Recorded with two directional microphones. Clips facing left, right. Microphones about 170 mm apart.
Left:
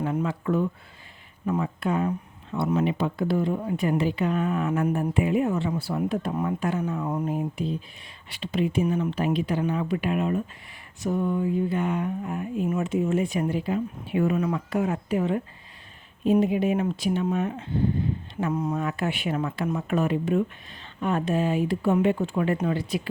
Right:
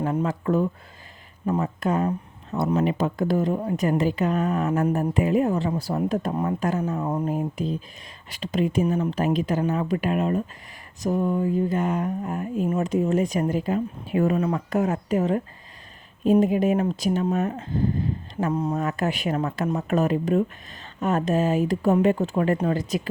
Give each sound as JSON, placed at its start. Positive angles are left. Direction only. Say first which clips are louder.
{"t": 0.0, "sound": "speech", "louder": "right 2 dB", "side_deg": -40}